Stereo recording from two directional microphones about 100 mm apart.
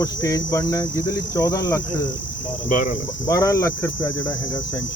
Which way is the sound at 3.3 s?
30° left (ahead or behind).